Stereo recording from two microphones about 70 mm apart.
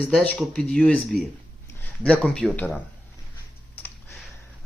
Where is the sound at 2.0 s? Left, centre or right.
Centre.